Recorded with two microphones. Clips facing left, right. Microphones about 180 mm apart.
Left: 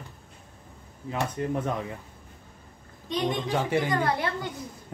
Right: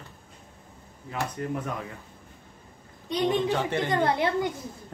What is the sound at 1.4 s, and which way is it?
Speech, 25° left (ahead or behind).